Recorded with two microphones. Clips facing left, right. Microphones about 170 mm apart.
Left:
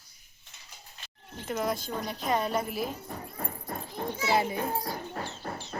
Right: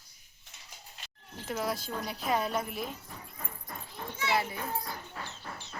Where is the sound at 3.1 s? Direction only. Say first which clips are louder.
Left 8 dB; 45° left (ahead or behind).